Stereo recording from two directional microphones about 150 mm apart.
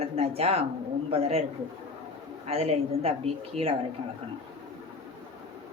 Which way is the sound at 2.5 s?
40° right (ahead or behind).